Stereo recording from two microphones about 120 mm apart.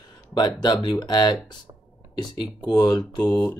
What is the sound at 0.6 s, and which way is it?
Speech, 40° left (ahead or behind).